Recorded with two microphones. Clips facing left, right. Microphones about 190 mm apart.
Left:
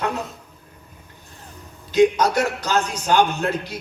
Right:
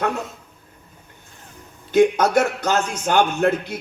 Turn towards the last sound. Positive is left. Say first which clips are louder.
# right 5 dB
turn(degrees=-55)  # may be behind; listen again after turning